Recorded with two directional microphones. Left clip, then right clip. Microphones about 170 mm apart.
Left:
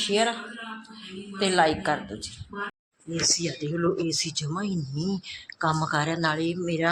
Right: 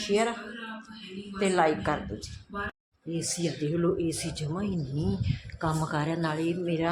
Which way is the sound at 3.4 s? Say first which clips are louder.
Left 1 dB; 10° right (ahead or behind).